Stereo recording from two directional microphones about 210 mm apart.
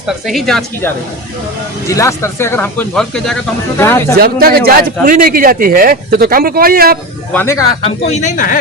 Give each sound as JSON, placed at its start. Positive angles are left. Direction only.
{"t": 0.3, "sound": "speech", "side_deg": 0}
{"t": 1.9, "sound": "speech", "side_deg": 15}
{"t": 4.1, "sound": "speech", "side_deg": -45}
{"t": 7.3, "sound": "speech", "side_deg": 10}
{"t": 7.9, "sound": "speech", "side_deg": 30}